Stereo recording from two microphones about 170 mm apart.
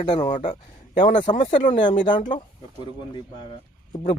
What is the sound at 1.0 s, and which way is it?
Speech, 45° left (ahead or behind).